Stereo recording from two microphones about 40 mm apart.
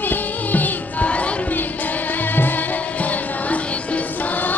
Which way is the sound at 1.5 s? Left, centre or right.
Left.